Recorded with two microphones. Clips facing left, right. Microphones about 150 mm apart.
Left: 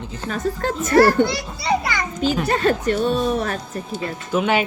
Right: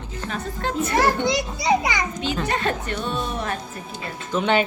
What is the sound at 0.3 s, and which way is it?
Speech, 40° left (ahead or behind).